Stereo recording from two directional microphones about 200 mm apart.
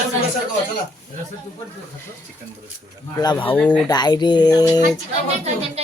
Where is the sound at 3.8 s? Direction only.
20° left (ahead or behind).